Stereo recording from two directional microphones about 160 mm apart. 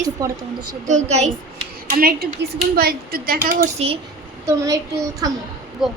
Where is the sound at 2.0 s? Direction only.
70° right (ahead or behind).